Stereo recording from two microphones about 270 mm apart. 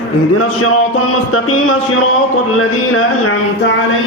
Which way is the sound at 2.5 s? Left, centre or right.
Left.